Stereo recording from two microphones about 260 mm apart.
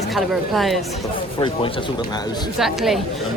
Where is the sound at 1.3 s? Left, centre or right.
Centre.